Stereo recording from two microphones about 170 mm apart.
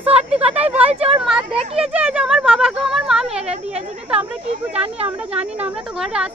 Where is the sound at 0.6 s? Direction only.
10° right (ahead or behind).